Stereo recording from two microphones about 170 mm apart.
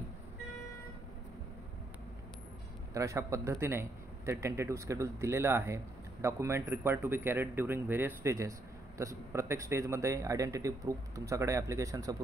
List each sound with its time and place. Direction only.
2.9 s speech: 20° right (ahead or behind)